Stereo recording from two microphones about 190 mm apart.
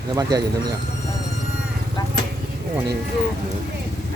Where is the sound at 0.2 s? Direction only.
20° right (ahead or behind).